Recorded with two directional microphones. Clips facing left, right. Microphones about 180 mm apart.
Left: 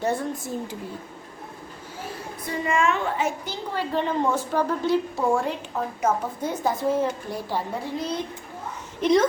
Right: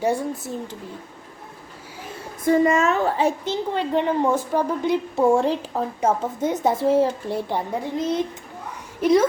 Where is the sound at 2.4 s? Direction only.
40° right (ahead or behind); by 8.3 s 20° right (ahead or behind).